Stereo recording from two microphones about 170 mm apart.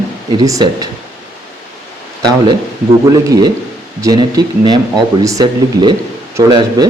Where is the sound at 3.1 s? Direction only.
20° right (ahead or behind).